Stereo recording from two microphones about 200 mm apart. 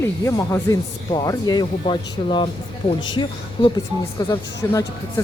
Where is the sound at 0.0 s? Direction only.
15° left (ahead or behind).